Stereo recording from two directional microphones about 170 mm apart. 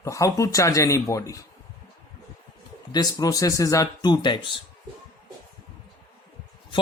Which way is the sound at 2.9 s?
20° left (ahead or behind).